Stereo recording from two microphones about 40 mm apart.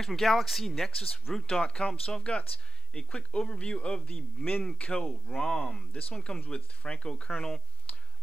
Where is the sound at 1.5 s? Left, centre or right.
Left.